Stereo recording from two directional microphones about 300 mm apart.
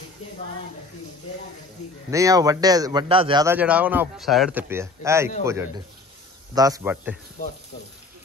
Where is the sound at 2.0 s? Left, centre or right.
Centre.